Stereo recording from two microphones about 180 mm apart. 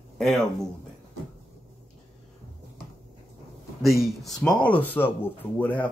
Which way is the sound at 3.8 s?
Centre (ahead or behind).